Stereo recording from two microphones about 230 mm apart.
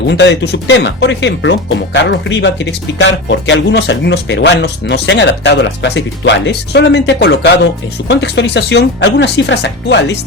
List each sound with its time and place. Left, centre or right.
0.1 s speech: left